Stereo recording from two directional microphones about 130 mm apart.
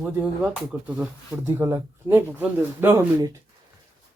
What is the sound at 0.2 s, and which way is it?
Speech, 5° right (ahead or behind).